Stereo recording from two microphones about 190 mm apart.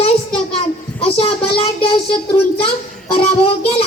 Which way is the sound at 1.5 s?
30° left (ahead or behind).